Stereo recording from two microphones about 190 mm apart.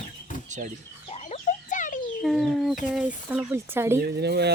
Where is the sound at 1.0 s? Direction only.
35° left (ahead or behind).